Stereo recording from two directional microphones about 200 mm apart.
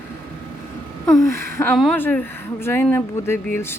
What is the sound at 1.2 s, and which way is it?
Speech, 15° left (ahead or behind).